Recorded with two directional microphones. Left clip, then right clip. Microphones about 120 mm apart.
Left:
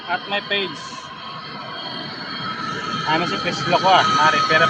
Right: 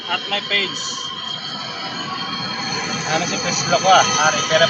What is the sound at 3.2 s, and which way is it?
Speech, 5° right (ahead or behind).